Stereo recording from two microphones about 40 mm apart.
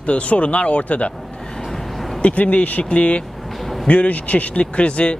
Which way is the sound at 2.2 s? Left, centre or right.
Left.